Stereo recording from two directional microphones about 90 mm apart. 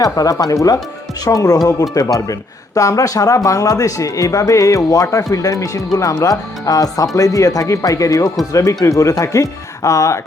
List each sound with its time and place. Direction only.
0.0 s speech: 40° left (ahead or behind)